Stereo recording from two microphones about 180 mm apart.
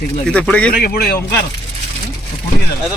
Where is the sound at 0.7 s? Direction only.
55° left (ahead or behind).